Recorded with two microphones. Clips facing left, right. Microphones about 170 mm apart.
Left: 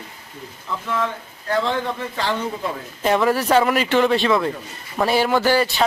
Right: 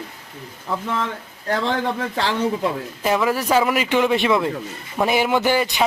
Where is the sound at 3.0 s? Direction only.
5° right (ahead or behind).